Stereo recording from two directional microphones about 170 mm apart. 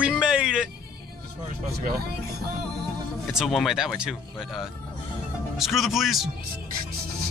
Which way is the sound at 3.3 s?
Centre (ahead or behind).